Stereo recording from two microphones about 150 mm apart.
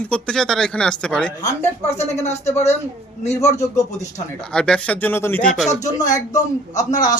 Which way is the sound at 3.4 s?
20° left (ahead or behind).